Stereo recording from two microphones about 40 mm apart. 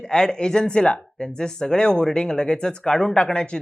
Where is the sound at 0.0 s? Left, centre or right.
Left.